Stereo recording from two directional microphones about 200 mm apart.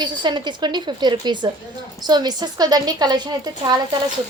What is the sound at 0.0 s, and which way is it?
Speech, 20° right (ahead or behind).